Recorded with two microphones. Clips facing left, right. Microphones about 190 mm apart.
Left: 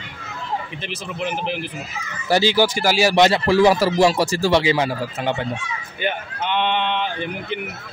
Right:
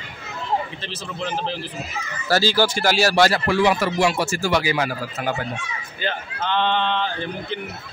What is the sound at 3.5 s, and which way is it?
A man's voice, 35° left (ahead or behind).